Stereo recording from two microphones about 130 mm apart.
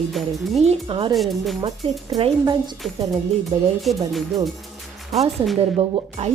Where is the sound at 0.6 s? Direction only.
45° right (ahead or behind).